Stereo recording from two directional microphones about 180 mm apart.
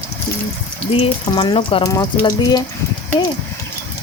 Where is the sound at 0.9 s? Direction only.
30° left (ahead or behind).